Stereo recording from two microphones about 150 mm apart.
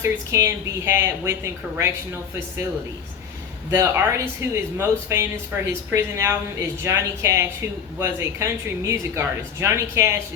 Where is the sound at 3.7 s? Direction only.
20° right (ahead or behind).